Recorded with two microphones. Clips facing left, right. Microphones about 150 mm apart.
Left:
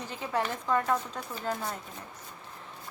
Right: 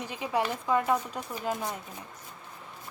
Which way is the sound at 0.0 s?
15° right (ahead or behind).